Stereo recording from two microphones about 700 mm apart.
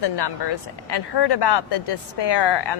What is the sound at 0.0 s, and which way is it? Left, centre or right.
Speech, left.